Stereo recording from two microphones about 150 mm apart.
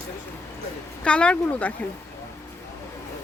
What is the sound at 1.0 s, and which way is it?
Speech, 5° left (ahead or behind).